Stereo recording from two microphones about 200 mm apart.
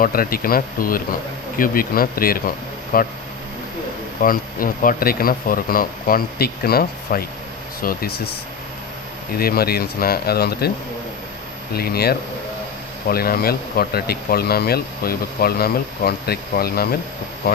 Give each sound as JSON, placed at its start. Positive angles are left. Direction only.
{"t": 0.0, "sound": "speech", "side_deg": 45}
{"t": 4.2, "sound": "speech", "side_deg": 45}
{"t": 9.4, "sound": "speech", "side_deg": 50}
{"t": 11.7, "sound": "speech", "side_deg": 50}